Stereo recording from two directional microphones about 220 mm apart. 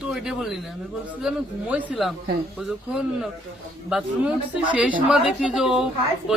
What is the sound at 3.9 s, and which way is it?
Speech, 5° right (ahead or behind).